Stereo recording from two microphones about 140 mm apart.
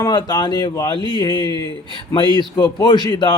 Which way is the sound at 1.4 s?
35° right (ahead or behind).